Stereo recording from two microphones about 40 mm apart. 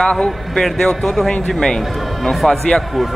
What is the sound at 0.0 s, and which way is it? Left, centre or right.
A man's voice, centre.